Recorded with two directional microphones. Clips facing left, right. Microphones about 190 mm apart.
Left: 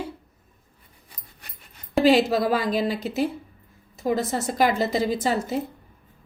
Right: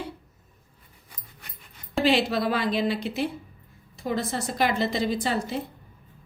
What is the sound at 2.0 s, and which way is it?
A woman's voice, 40° left (ahead or behind).